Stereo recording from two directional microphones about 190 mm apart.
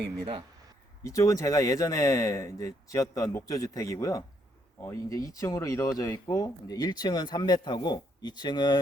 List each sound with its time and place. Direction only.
1.0 s speech: 15° left (ahead or behind)